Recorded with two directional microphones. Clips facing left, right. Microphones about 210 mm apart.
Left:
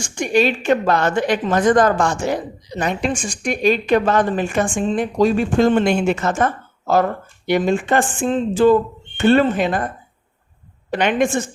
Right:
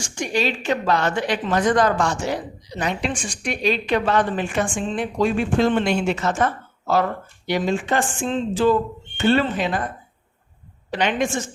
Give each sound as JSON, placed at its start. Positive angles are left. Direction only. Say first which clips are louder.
{"t": 0.0, "sound": "a woman's voice", "louder": "left 6 dB", "side_deg": 55}
{"t": 10.9, "sound": "a woman's voice", "louder": "left 4 dB", "side_deg": 55}